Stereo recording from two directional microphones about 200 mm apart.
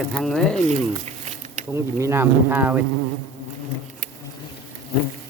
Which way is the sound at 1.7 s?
15° right (ahead or behind).